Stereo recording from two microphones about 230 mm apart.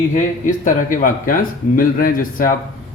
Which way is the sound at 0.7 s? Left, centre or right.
Left.